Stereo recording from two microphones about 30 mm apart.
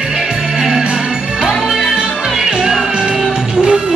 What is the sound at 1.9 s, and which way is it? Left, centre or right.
Music, right.